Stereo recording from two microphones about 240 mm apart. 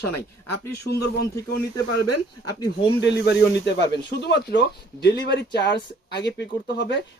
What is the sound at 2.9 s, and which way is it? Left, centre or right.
Speech, left.